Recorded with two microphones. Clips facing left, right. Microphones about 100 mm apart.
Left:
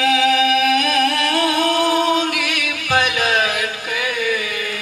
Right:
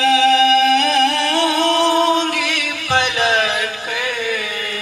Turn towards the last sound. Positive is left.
turn(degrees=-35)  # may be behind; listen again after turning